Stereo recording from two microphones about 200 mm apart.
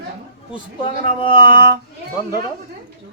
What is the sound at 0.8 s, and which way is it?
Speech, 25° left (ahead or behind).